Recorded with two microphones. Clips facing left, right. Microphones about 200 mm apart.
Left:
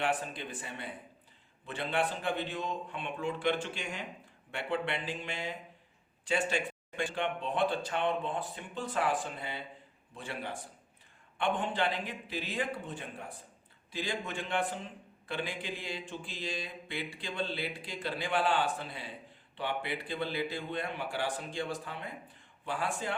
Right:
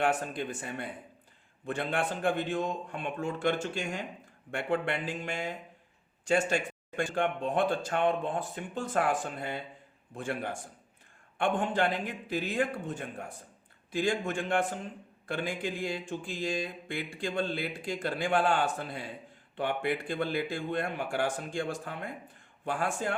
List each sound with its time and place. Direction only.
0.0 s mantra: 45° right (ahead or behind)